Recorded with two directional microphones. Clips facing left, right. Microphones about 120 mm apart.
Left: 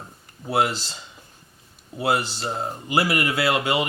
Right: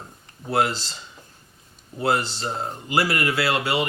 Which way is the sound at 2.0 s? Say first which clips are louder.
Even; 10° left (ahead or behind).